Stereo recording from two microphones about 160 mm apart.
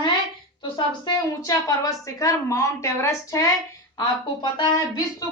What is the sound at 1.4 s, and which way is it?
A woman's voice, 20° left (ahead or behind).